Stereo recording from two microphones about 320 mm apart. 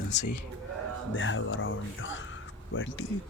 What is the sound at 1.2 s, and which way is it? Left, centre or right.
Speech, left.